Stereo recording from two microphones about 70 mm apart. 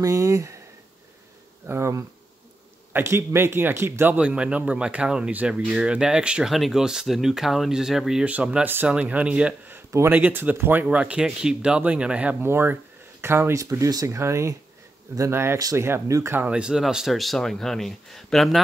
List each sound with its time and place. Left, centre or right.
0.0 s speech: right
1.7 s a man's voice: right
4.2 s speech: centre
8.3 s speech: centre
12.4 s a man's voice: right
13.6 s a man's voice: right
16.3 s speech: centre